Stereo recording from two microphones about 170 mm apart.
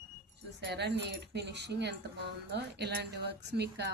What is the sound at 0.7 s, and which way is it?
Speech, 90° right.